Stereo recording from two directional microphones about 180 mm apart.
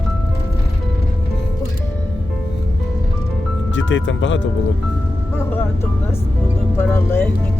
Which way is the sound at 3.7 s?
90° left.